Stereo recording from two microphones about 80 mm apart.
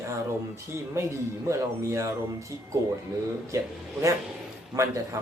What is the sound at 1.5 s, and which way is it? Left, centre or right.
Speech, right.